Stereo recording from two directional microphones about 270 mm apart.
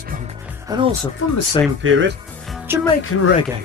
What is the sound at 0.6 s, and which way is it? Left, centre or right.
Speech, centre.